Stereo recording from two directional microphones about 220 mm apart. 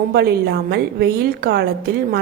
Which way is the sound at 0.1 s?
45° right (ahead or behind).